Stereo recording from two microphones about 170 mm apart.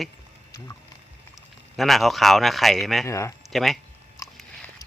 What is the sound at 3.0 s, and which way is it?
Speech, 15° left (ahead or behind).